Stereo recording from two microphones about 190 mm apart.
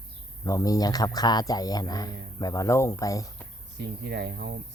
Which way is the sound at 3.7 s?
65° right (ahead or behind).